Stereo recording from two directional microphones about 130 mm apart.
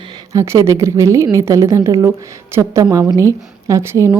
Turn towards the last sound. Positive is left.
turn(degrees=-25)  # may be behind; listen again after turning